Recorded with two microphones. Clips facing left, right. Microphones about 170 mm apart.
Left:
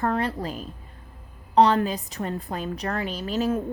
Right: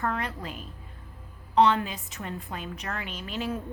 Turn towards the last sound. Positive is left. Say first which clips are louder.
# left 7 dB
turn(degrees=40)  # may be behind; listen again after turning